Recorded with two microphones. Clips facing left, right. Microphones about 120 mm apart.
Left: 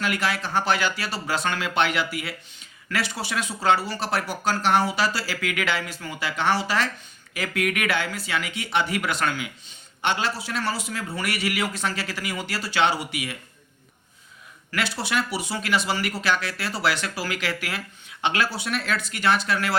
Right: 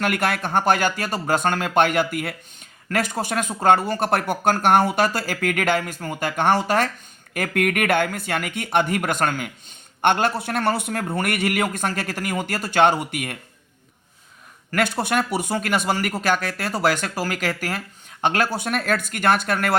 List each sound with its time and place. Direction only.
0.0 s speech: 55° right (ahead or behind)
14.7 s speech: 50° right (ahead or behind)